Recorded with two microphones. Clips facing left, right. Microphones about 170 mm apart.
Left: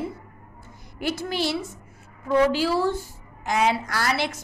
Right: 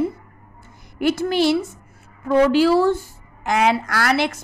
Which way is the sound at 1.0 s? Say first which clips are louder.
Right 8 dB; 60° right (ahead or behind).